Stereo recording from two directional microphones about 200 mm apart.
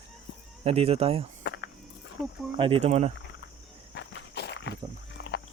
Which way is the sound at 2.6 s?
30° right (ahead or behind).